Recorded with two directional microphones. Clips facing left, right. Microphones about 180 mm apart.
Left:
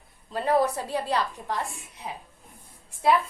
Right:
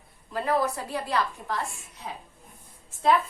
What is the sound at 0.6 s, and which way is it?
Speech, 35° left (ahead or behind).